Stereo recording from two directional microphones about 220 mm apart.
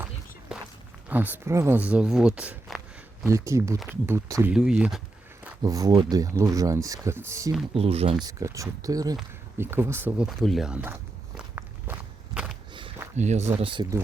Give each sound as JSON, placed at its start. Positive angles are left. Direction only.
{"t": 0.0, "sound": "walk", "side_deg": -5}
{"t": 1.1, "sound": "speech", "side_deg": -10}
{"t": 5.6, "sound": "speech", "side_deg": -15}
{"t": 7.7, "sound": "speech", "side_deg": -25}
{"t": 8.2, "sound": "speech", "side_deg": -15}
{"t": 11.3, "sound": "walk", "side_deg": -5}
{"t": 13.1, "sound": "speech", "side_deg": -30}